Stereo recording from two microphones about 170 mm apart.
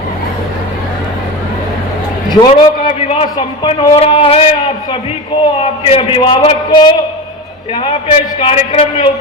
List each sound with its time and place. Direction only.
2.5 s a man's voice: 30° left (ahead or behind)
7.9 s a man's voice: 35° left (ahead or behind)